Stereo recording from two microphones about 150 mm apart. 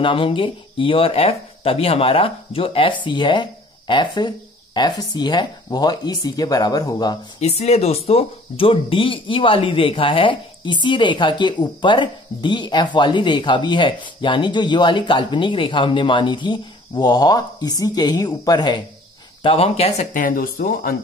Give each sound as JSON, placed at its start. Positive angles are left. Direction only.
{"t": 0.0, "sound": "speech", "side_deg": 35}
{"t": 7.3, "sound": "speech", "side_deg": 45}
{"t": 19.4, "sound": "speech", "side_deg": 40}
{"t": 20.2, "sound": "speech", "side_deg": 70}